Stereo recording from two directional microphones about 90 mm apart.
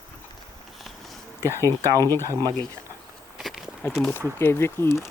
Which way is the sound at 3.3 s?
Centre (ahead or behind).